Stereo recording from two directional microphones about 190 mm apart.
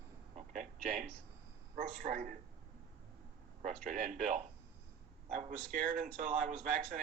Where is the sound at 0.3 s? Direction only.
40° right (ahead or behind).